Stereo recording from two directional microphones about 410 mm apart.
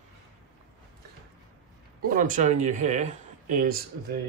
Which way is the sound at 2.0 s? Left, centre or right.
Centre.